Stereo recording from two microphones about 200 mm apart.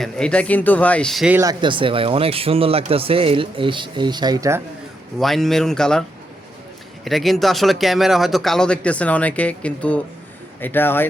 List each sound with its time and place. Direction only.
0.0 s speech: 5° left (ahead or behind)
1.4 s speech: 20° right (ahead or behind)
5.2 s speech: centre (ahead or behind)